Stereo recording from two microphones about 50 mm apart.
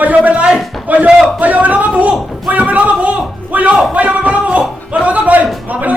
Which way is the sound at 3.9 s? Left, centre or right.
Right.